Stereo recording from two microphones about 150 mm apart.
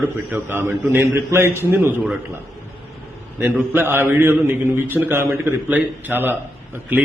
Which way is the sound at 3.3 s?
10° right (ahead or behind).